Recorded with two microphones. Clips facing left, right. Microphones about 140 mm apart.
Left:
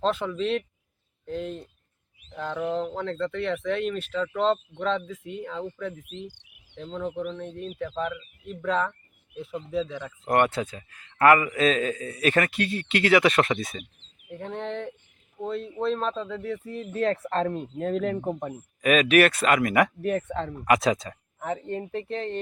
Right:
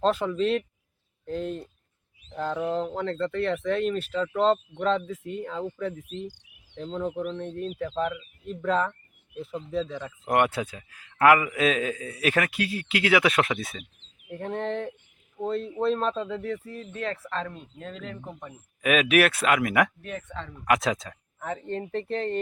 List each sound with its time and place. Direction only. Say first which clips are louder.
0.0 s speech: right 2 dB; 5° right (ahead or behind)
7.0 s speech: even; 10° right (ahead or behind)
7.3 s speech: right 3 dB; centre (ahead or behind)
7.9 s speech: right 2 dB; 10° right (ahead or behind)
16.9 s speech: left 7 dB; 35° left (ahead or behind); by 18.2 s 55° left (ahead or behind)
18.2 s speech: left 10 dB; 40° left (ahead or behind)
18.8 s speech: left 2 dB; 5° right (ahead or behind)
20.0 s speech: left 10 dB; 55° left (ahead or behind)
20.7 s speech: left 2 dB; centre (ahead or behind)
21.3 s speech: left 1 dB; 15° left (ahead or behind)
22.1 s speech: right 3 dB; centre (ahead or behind)